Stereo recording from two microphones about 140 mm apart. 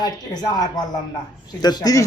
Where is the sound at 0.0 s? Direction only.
30° left (ahead or behind).